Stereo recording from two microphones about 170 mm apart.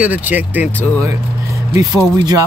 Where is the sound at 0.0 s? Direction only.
10° right (ahead or behind).